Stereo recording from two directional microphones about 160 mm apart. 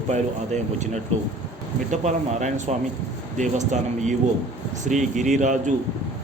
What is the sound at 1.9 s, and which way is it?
A man's voice, 45° right (ahead or behind).